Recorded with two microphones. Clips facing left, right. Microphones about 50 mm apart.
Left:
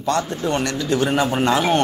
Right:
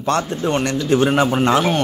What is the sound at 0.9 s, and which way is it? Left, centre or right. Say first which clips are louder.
Speech: right 4 dB; right.